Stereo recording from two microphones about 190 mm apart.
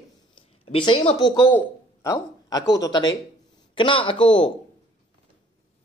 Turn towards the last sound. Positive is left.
turn(degrees=25)  # may be behind; listen again after turning